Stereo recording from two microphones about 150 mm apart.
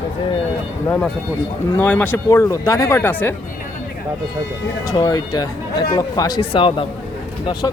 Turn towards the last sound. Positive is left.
turn(degrees=35)  # may be behind; listen again after turning